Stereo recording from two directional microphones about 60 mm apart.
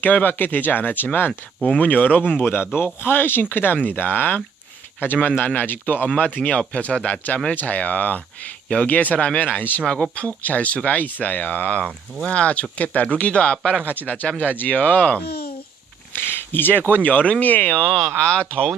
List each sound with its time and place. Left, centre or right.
0.0 s speech: left
9.8 s speech: centre
13.8 s speech: right
14.1 s speech: left
16.1 s speech: left
17.8 s speech: centre